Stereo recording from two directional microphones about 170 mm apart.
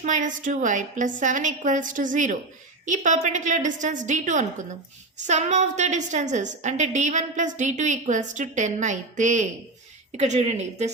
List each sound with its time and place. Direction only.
0.0 s a woman's voice: 50° right (ahead or behind)